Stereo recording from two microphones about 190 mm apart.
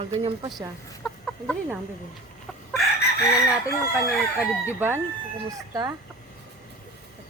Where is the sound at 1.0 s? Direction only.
5° left (ahead or behind).